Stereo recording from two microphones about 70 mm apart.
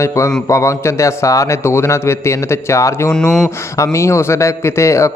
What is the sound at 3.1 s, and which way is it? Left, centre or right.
Mantra, centre.